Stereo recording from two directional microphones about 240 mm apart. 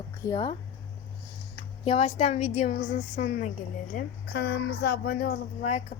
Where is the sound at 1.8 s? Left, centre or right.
Left.